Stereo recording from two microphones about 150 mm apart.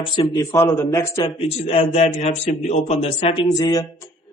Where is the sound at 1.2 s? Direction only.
40° left (ahead or behind).